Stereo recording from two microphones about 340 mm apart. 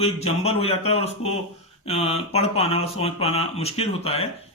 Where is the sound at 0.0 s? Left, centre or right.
Centre.